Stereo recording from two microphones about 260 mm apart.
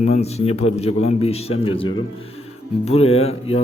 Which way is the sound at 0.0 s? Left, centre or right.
Left.